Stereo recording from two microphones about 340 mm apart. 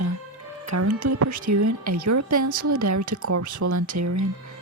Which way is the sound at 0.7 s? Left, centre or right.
Right.